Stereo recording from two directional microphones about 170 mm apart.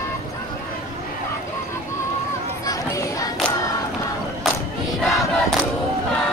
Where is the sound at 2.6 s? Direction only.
20° left (ahead or behind).